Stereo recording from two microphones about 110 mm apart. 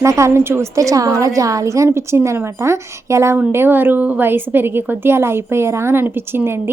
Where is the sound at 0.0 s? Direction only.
30° right (ahead or behind).